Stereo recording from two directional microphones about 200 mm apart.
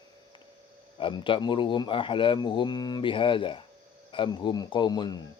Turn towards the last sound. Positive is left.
turn(degrees=20)  # may be behind; listen again after turning